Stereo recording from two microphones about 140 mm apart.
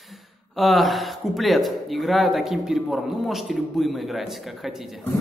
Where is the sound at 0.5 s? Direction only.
Centre (ahead or behind).